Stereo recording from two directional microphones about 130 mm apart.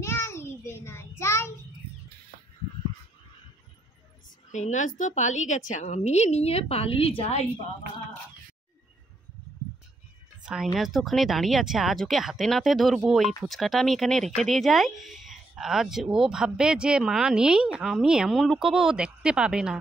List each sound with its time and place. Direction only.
0.0 s child singing: 20° left (ahead or behind)
4.5 s a woman's voice: 70° left (ahead or behind); by 7.4 s 50° left (ahead or behind)
10.4 s speech: 5° right (ahead or behind)